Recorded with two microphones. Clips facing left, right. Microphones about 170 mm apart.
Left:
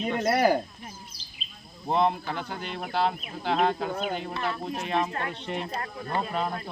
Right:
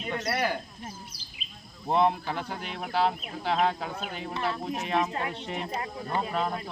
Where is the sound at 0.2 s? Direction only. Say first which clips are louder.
Left 8 dB; 40° left (ahead or behind).